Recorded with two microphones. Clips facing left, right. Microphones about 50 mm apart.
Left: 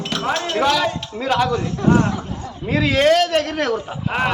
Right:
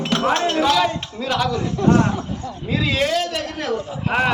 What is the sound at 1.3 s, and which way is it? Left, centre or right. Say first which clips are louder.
Speech: left 3 dB; left.